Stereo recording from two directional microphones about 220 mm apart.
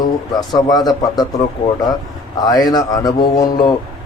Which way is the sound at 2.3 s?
20° left (ahead or behind).